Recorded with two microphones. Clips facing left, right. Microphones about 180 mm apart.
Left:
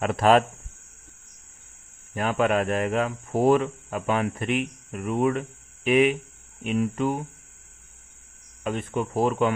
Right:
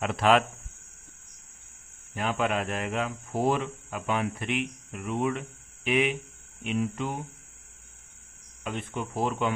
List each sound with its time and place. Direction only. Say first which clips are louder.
0.0 s speech: left 4 dB; 45° left (ahead or behind)
2.1 s speech: left 5 dB; 50° left (ahead or behind)
8.6 s speech: left 6 dB; 45° left (ahead or behind)